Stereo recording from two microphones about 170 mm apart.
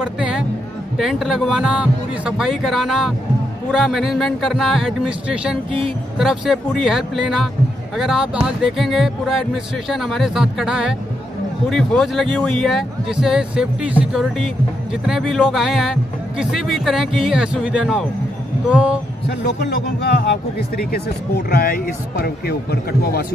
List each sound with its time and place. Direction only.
0.0 s speech: 5° right (ahead or behind)
18.7 s music: 5° right (ahead or behind)
19.2 s speech: 80° left